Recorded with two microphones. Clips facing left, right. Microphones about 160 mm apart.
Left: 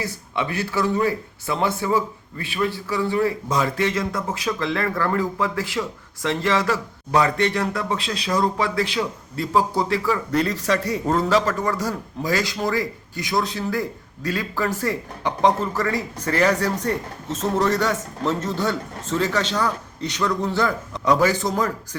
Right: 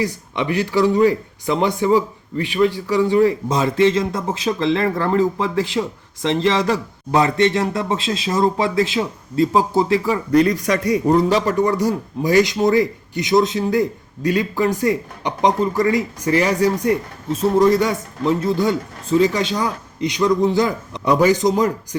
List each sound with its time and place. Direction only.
0.0 s speech: 15° right (ahead or behind)